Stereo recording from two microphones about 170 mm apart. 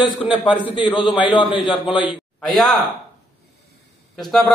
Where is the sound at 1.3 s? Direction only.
30° left (ahead or behind).